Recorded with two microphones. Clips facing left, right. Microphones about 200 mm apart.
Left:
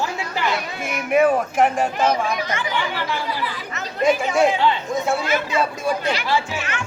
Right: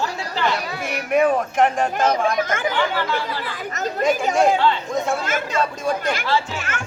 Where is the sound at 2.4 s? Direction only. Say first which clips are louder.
Right 4 dB; 50° right (ahead or behind).